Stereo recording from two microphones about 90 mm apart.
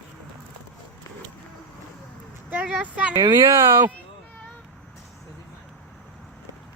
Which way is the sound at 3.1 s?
55° right (ahead or behind).